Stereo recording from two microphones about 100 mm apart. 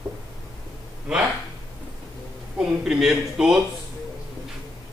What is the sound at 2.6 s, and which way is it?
Speech, 5° right (ahead or behind).